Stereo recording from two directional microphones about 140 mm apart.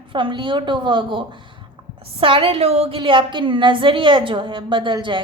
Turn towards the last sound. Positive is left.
turn(degrees=-35)  # may be behind; listen again after turning